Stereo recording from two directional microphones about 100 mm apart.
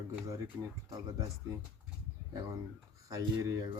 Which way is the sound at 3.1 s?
35° right (ahead or behind).